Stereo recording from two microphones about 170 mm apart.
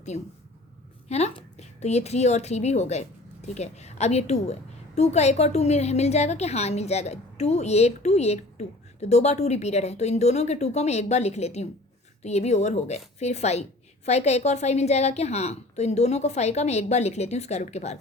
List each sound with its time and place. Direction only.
0.1 s a woman's voice: 45° left (ahead or behind)